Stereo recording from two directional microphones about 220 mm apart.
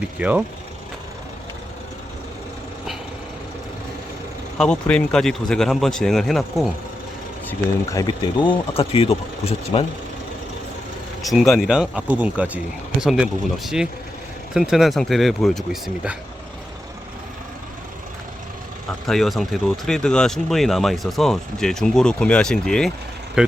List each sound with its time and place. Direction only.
0.0 s speech: 5° right (ahead or behind)
4.5 s speech: 5° left (ahead or behind)
7.9 s speech: 15° left (ahead or behind)
11.2 s speech: centre (ahead or behind)
14.5 s speech: centre (ahead or behind)
19.0 s speech: centre (ahead or behind)